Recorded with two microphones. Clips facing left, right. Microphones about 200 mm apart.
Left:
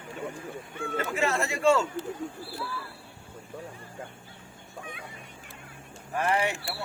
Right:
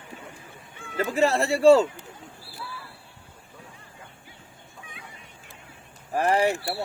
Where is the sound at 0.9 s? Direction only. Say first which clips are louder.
Right 6 dB; 35° right (ahead or behind).